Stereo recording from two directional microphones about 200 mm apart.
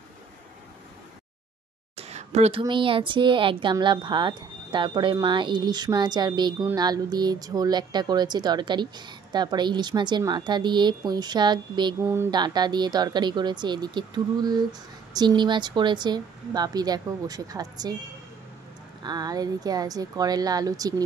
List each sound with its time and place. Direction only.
2.0 s a sound: 35° right (ahead or behind)
2.6 s speech: 25° right (ahead or behind)
19.0 s speech: 20° right (ahead or behind)